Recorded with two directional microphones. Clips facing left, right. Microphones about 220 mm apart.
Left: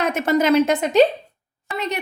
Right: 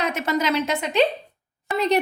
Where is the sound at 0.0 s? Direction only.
50° left (ahead or behind).